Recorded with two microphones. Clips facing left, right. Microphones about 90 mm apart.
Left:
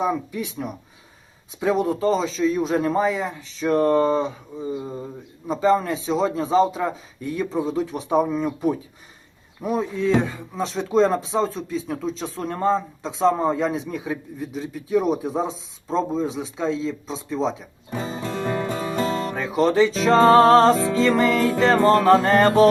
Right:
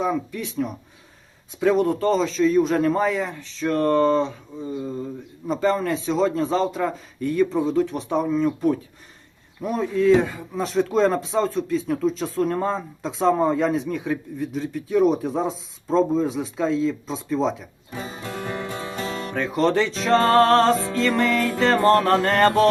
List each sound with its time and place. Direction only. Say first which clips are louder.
0.0 s speech: even; 10° left (ahead or behind)
3.7 s speech: left 1 dB; 15° left (ahead or behind)
17.9 s music: left 4 dB; 30° left (ahead or behind)
19.4 s speech: left 2 dB; centre (ahead or behind)